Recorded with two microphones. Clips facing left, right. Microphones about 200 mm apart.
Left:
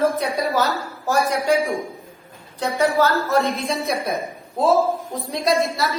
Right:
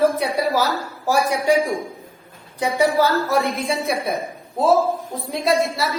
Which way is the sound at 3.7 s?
Centre (ahead or behind).